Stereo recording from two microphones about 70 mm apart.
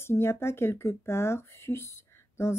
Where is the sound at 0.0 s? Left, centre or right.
Left.